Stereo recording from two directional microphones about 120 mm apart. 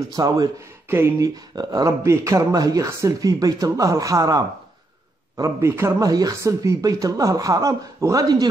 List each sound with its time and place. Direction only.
0.1 s speech: 35° right (ahead or behind)
5.4 s speech: 25° right (ahead or behind)